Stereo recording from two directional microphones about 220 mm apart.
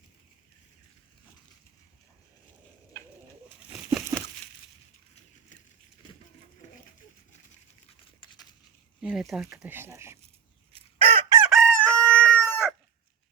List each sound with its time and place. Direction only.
3.7 s a sound: 10° right (ahead or behind)
9.0 s speech: 5° right (ahead or behind)
10.7 s chicken: 25° right (ahead or behind)
11.4 s chicken: centre (ahead or behind)